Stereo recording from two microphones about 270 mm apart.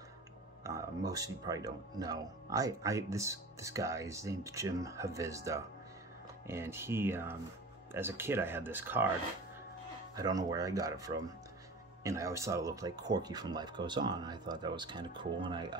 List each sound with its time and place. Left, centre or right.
0.7 s speech: centre
10.1 s speech: centre